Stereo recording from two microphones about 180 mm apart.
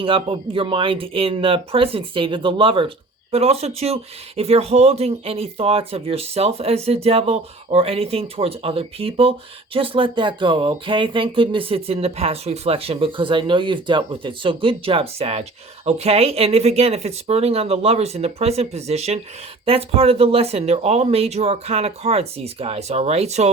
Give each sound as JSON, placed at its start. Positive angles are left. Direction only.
{"t": 0.0, "sound": "speech", "side_deg": -30}